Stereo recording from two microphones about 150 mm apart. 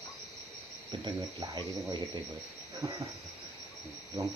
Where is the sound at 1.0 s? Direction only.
30° right (ahead or behind).